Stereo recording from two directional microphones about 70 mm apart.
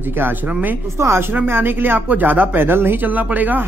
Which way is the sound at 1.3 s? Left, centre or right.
Right.